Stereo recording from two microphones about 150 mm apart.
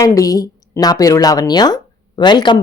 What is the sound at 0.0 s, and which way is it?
Speech, 25° left (ahead or behind).